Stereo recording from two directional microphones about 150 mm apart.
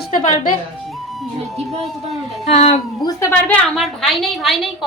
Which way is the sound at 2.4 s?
45° left (ahead or behind).